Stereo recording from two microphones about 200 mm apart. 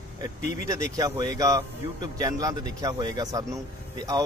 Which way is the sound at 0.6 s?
15° right (ahead or behind).